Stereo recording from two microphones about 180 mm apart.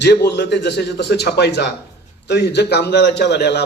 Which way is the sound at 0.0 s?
65° left (ahead or behind).